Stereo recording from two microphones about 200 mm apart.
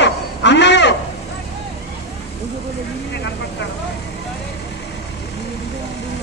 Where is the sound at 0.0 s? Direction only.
60° left (ahead or behind).